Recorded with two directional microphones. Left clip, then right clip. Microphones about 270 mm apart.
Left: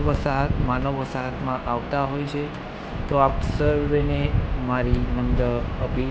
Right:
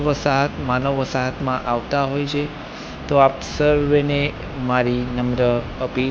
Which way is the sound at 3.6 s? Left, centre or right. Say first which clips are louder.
Right 6 dB; centre.